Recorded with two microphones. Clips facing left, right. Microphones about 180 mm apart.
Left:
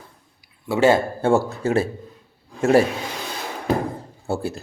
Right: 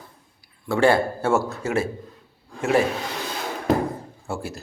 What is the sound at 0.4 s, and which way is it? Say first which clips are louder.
Speech: left 2 dB; 20° left (ahead or behind).